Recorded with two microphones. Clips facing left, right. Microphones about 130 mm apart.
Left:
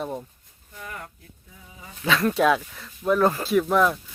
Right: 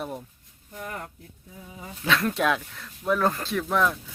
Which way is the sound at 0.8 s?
30° right (ahead or behind).